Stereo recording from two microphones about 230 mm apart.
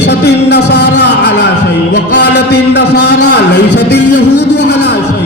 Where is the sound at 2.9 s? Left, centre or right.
Left.